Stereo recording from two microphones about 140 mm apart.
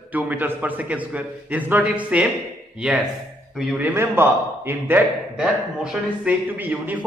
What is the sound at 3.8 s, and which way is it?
A man's voice, 15° right (ahead or behind).